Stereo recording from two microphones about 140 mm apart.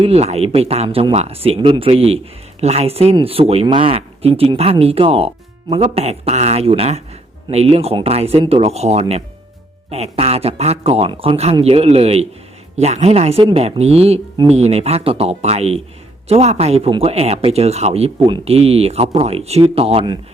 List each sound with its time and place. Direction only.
0.0 s speech: 50° right (ahead or behind)
0.9 s speech: 35° right (ahead or behind)
1.1 s speech: 45° right (ahead or behind)